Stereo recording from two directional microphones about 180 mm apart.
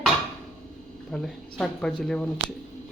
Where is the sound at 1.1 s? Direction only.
5° left (ahead or behind).